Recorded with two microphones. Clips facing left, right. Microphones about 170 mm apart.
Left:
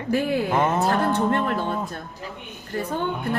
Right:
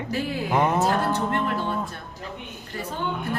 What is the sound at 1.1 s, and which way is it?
Speech, 50° left (ahead or behind).